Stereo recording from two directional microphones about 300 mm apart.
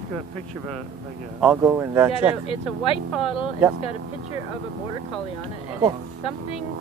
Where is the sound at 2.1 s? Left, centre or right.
Centre.